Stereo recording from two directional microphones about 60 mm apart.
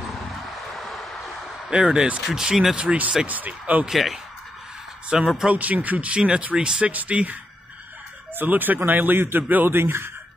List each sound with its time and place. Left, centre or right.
0.0 s vehicle: centre
1.7 s speech: centre
3.9 s speech: centre
5.5 s speech: right
8.4 s a man's voice: right